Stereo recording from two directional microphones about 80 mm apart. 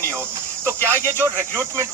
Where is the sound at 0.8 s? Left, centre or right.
Right.